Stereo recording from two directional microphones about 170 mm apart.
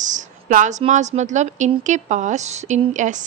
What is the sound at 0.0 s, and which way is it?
Speech, 45° right (ahead or behind).